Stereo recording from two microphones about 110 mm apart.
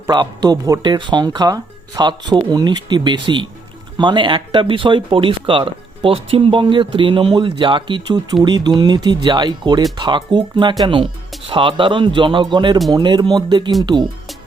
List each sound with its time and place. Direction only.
0.1 s speech: 40° right (ahead or behind)
0.8 s speech: 45° right (ahead or behind)